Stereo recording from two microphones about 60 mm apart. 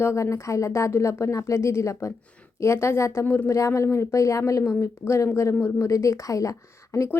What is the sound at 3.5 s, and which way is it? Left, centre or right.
A woman's voice, left.